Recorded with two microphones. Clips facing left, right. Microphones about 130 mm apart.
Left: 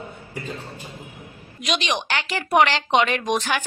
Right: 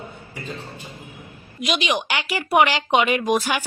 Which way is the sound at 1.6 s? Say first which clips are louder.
Right 2 dB; 5° right (ahead or behind).